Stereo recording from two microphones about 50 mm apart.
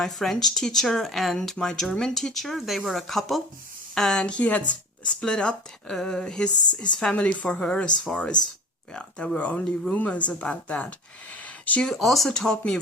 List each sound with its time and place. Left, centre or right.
0.0 s speech: centre
7.2 s speech: left
7.4 s speech: centre
11.4 s a sound: left
11.9 s speech: centre
12.3 s speech: centre